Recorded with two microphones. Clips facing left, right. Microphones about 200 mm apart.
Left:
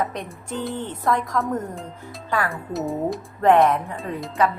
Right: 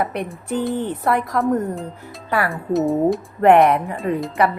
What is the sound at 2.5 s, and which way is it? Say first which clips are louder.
Speech: right 8 dB; centre (ahead or behind).